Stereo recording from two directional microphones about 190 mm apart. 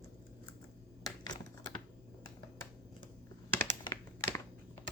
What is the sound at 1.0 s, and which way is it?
Computer keyboard, 20° left (ahead or behind).